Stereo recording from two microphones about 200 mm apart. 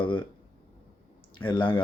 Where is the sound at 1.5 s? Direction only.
25° left (ahead or behind).